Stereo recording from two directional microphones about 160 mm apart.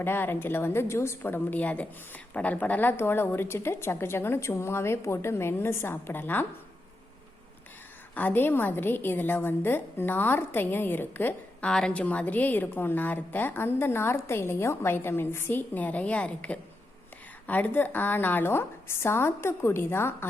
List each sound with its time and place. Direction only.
0.0 s a woman's voice: 15° left (ahead or behind)
8.1 s a woman's voice: 10° left (ahead or behind)